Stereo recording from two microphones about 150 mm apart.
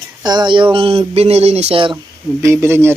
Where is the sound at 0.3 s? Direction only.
30° right (ahead or behind).